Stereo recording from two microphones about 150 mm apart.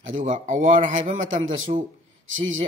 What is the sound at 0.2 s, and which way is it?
A man's voice, 60° right (ahead or behind).